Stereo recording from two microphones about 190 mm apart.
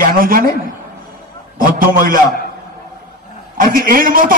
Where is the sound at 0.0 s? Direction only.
50° right (ahead or behind).